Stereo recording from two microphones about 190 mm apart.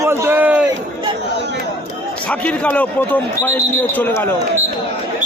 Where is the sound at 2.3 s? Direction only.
5° left (ahead or behind).